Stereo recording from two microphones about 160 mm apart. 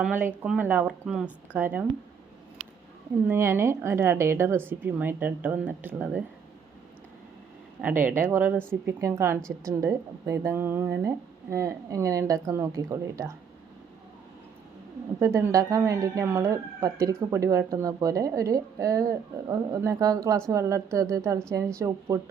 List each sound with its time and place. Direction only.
0.0 s speech: 10° right (ahead or behind)
3.2 s speech: 15° right (ahead or behind)
7.8 s speech: 10° right (ahead or behind)
15.2 s speech: 20° right (ahead or behind)